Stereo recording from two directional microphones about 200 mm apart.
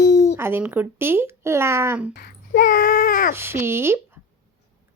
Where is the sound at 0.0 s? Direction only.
60° left (ahead or behind).